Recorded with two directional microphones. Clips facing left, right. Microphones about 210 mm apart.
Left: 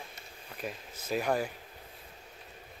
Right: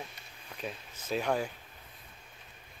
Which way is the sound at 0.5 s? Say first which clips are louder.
Left 1 dB; 10° left (ahead or behind).